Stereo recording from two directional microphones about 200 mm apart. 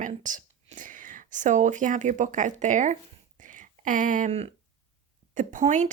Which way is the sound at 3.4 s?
40° right (ahead or behind).